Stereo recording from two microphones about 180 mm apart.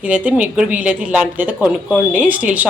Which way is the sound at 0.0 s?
10° right (ahead or behind).